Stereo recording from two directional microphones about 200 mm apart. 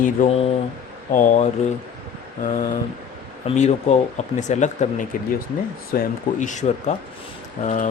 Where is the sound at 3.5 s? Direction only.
35° left (ahead or behind).